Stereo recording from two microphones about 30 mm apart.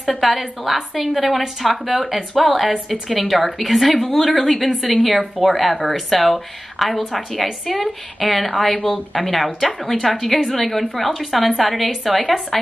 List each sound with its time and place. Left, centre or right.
0.2 s speech: centre